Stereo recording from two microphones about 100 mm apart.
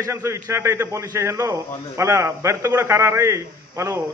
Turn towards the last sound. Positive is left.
turn(degrees=-30)  # may be behind; listen again after turning